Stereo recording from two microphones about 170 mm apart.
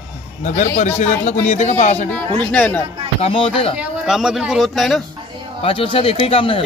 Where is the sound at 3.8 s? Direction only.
5° right (ahead or behind).